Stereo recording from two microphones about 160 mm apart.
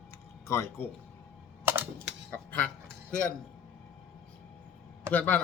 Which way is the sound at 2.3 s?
10° left (ahead or behind).